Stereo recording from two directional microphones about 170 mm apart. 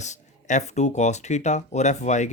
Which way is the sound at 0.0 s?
45° left (ahead or behind).